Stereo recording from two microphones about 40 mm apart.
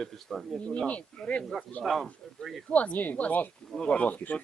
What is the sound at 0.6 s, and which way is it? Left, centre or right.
Speech, left.